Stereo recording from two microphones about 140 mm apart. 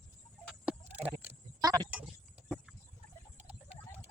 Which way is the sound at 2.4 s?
5° right (ahead or behind).